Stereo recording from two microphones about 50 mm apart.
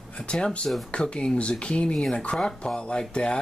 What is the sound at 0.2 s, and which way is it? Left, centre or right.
Speech, centre.